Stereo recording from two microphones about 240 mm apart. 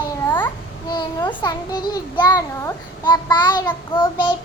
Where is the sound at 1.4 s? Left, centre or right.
Centre.